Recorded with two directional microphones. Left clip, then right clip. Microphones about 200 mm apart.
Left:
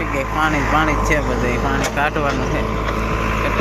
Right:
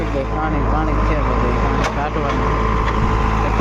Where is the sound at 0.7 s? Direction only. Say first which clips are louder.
Left 3 dB; 45° left (ahead or behind); by 1.8 s 30° left (ahead or behind).